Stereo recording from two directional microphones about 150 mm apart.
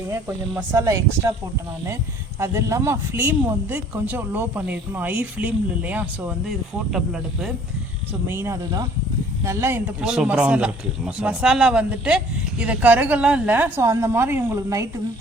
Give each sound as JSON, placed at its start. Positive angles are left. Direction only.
{"t": 0.1, "sound": "speech", "side_deg": -15}
{"t": 2.4, "sound": "speech", "side_deg": -20}
{"t": 8.3, "sound": "speech", "side_deg": -20}
{"t": 10.0, "sound": "speech", "side_deg": -5}